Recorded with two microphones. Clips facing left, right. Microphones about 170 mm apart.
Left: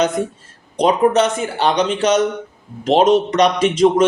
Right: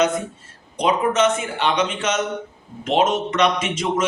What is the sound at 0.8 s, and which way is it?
Speech, 35° left (ahead or behind).